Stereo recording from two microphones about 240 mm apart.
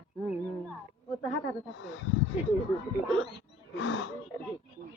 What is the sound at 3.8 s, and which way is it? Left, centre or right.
Speech, left.